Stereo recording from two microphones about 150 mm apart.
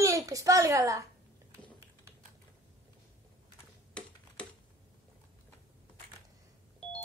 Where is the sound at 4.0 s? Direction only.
5° left (ahead or behind).